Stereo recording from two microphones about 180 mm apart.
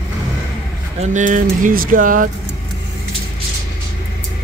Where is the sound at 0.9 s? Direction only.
40° right (ahead or behind).